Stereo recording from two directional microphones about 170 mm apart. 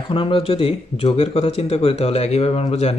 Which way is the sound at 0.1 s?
30° left (ahead or behind).